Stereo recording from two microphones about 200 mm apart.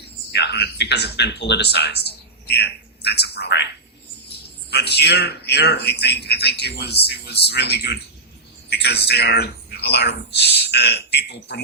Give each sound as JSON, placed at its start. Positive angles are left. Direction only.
{"t": 0.3, "sound": "speech", "side_deg": 55}
{"t": 4.7, "sound": "a man's voice", "side_deg": 55}